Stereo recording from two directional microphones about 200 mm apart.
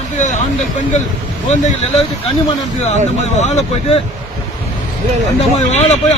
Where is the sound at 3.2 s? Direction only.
35° left (ahead or behind).